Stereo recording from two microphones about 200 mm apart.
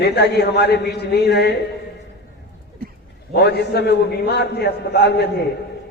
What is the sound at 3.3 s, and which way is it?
A man's voice, 55° left (ahead or behind).